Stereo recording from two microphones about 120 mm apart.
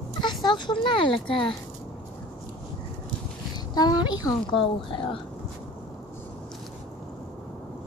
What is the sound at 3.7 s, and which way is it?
Speech, 35° left (ahead or behind).